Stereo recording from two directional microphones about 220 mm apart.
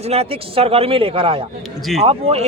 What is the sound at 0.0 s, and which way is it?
A man's voice, 25° right (ahead or behind).